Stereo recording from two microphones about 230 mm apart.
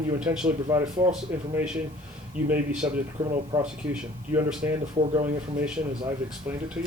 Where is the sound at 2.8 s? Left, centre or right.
Centre.